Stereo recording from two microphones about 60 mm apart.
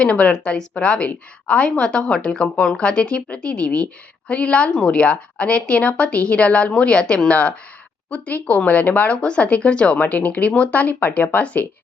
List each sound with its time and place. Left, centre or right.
0.0 s a woman's voice: centre